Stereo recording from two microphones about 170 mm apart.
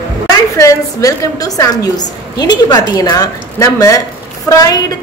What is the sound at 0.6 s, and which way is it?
A woman's voice, 20° left (ahead or behind).